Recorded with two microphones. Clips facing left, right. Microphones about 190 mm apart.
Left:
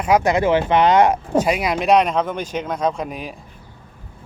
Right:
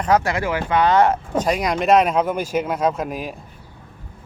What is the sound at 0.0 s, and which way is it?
Speech, 15° left (ahead or behind).